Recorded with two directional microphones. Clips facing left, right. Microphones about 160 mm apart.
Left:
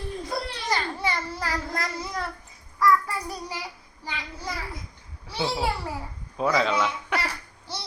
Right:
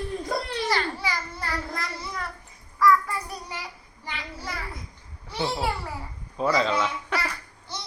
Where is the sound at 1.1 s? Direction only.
30° left (ahead or behind).